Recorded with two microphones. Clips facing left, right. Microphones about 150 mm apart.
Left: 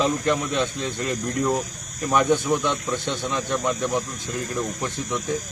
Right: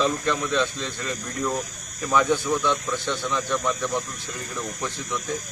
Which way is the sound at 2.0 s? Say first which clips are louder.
Left 2 dB; 15° left (ahead or behind).